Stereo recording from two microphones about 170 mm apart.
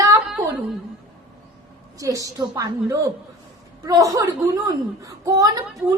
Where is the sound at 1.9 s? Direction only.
20° right (ahead or behind).